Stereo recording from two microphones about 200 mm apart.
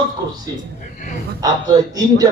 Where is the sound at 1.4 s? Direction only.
20° right (ahead or behind).